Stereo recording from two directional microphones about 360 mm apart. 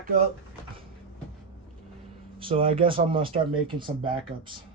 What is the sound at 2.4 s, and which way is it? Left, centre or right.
Speech, centre.